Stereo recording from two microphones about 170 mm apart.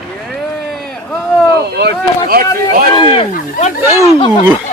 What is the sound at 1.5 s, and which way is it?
Speech, 70° right (ahead or behind).